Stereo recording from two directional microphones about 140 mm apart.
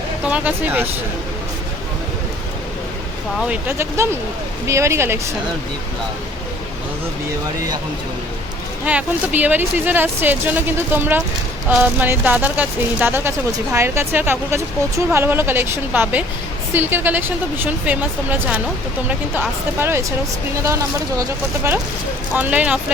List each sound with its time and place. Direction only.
0.3 s speech: 10° right (ahead or behind)
3.3 s speech: 5° right (ahead or behind)
3.7 s speech: 20° right (ahead or behind)
8.9 s speech: 10° right (ahead or behind)
21.2 s speech: 20° right (ahead or behind)